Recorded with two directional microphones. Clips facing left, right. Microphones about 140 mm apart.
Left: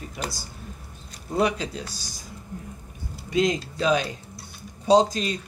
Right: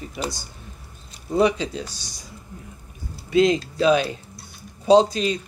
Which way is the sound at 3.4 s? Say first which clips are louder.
Right 5 dB; 30° right (ahead or behind).